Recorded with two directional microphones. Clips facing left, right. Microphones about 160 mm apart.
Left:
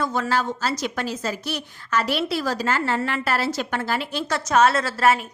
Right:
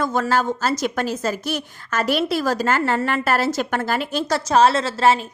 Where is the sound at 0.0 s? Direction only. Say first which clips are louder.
Right 3 dB; 50° right (ahead or behind).